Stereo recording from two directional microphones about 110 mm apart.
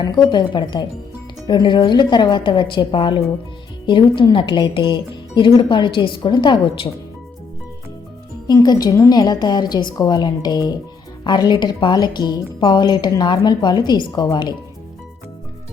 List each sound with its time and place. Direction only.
0.0 s a woman's voice: 45° left (ahead or behind)
8.4 s a woman's voice: 35° left (ahead or behind)